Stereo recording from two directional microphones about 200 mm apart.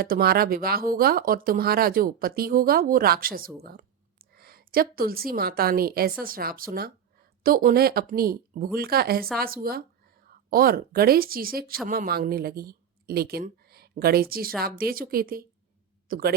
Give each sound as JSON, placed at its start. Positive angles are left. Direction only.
{"t": 0.0, "sound": "a woman's voice", "side_deg": -50}